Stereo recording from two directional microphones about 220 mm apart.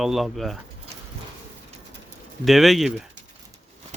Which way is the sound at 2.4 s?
Centre (ahead or behind).